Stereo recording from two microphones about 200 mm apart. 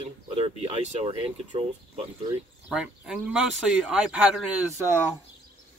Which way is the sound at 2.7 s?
5° right (ahead or behind).